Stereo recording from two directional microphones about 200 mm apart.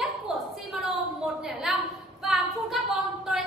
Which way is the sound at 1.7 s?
Centre (ahead or behind).